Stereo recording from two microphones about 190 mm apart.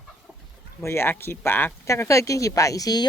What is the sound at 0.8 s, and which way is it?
Speech, 15° left (ahead or behind).